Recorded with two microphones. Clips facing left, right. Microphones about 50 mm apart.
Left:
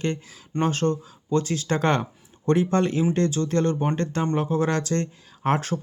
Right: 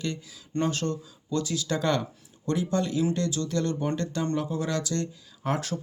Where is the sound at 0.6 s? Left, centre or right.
Left.